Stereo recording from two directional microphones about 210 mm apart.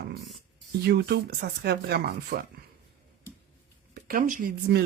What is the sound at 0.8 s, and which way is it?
Speech, 50° right (ahead or behind).